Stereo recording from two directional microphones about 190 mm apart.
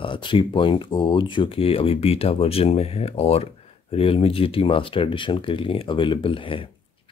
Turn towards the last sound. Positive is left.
turn(degrees=30)  # may be behind; listen again after turning